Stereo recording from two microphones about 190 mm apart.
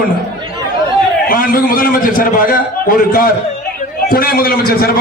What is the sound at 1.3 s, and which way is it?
A man's voice, 50° left (ahead or behind).